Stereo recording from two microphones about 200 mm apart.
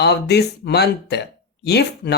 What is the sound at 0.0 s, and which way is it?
Speech, 55° left (ahead or behind).